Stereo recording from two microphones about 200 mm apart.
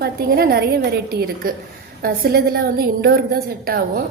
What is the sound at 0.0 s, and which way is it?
A woman's voice, 50° right (ahead or behind).